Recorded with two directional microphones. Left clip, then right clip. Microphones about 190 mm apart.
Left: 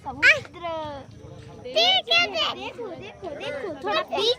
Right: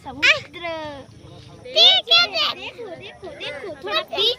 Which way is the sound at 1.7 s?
30° left (ahead or behind).